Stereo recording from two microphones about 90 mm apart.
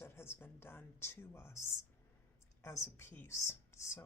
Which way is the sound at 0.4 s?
25° left (ahead or behind).